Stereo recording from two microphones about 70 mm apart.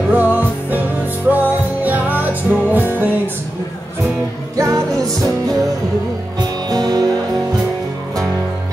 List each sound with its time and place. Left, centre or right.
0.1 s music: right
4.6 s music: right
6.7 s music: right